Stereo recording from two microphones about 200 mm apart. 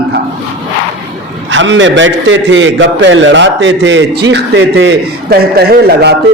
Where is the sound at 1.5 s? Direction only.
65° right (ahead or behind).